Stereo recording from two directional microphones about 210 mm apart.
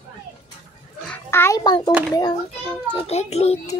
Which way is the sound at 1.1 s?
10° left (ahead or behind).